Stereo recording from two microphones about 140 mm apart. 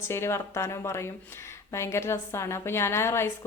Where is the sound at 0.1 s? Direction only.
20° left (ahead or behind).